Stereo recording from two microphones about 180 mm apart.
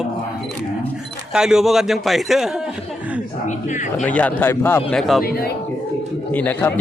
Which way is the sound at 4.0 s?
10° left (ahead or behind).